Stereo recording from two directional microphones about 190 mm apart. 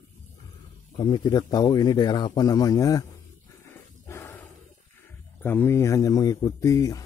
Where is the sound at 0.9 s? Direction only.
25° left (ahead or behind).